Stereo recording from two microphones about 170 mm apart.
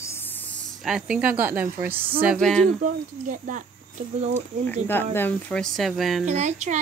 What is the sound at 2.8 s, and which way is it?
Speech, 50° right (ahead or behind).